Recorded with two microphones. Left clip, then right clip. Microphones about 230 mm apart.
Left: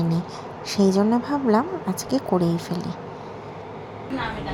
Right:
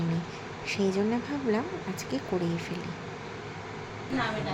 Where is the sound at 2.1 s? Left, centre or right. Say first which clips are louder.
Left 9 dB; left.